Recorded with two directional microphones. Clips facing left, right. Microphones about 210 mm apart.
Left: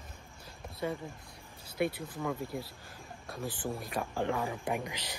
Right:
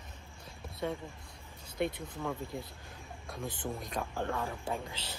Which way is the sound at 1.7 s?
5° left (ahead or behind).